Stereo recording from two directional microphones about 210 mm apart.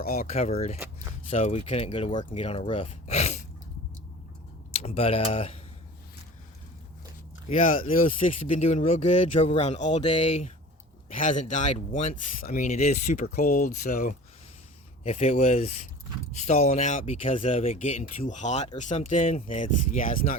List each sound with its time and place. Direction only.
0.0 s speech: 45° left (ahead or behind)
0.3 s speech: 30° left (ahead or behind)
4.7 s speech: 30° left (ahead or behind)
7.5 s speech: 40° left (ahead or behind)